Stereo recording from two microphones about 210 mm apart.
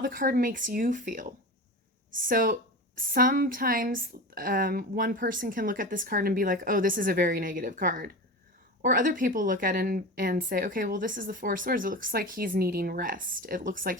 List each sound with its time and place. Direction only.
0.0 s a woman's voice: 40° right (ahead or behind)